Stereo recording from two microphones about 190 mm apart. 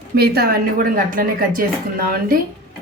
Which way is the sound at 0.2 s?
55° right (ahead or behind).